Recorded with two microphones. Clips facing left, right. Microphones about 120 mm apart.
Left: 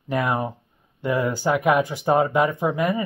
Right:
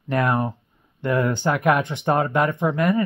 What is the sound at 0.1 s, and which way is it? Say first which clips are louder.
Speech: right 2 dB; 5° left (ahead or behind).